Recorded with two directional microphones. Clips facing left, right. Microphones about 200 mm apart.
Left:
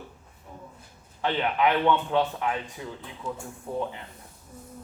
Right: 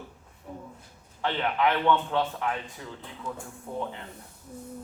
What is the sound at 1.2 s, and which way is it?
A man's voice, 15° left (ahead or behind).